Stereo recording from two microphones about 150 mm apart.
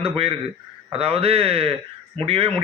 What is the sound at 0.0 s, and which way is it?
A man's voice, 40° right (ahead or behind).